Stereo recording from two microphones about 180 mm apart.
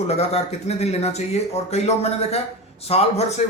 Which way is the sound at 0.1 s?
35° left (ahead or behind).